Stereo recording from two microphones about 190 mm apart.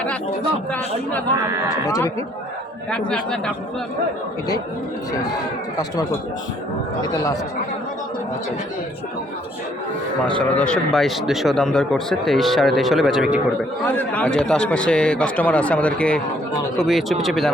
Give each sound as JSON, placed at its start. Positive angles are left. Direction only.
{"t": 1.9, "sound": "speech", "side_deg": 20}
{"t": 2.9, "sound": "a man's voice", "side_deg": 5}
{"t": 10.4, "sound": "a man's voice", "side_deg": 5}